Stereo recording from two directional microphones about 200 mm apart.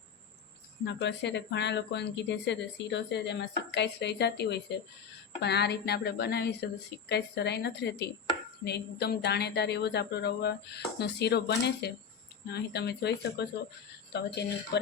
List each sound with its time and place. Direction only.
0.9 s speech: 60° left (ahead or behind)